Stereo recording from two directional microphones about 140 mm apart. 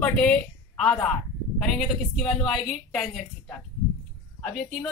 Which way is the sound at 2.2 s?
5° left (ahead or behind).